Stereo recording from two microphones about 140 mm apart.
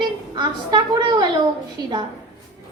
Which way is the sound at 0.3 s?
30° right (ahead or behind).